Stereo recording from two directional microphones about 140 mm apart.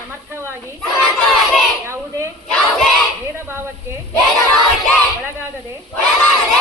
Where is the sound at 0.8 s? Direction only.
5° left (ahead or behind).